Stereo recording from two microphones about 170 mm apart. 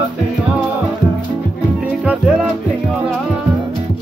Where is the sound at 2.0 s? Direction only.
5° right (ahead or behind).